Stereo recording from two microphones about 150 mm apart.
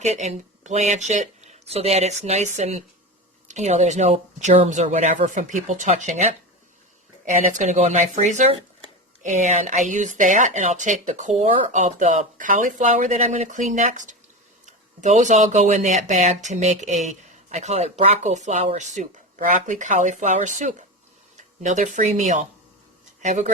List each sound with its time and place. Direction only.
0.0 s speech: 50° right (ahead or behind)
7.3 s speech: 55° right (ahead or behind)